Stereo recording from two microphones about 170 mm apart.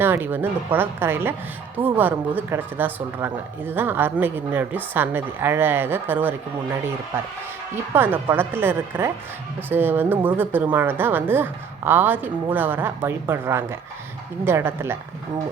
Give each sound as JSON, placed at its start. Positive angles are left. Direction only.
{"t": 0.0, "sound": "a woman's voice", "side_deg": -10}
{"t": 7.9, "sound": "a woman's voice", "side_deg": -10}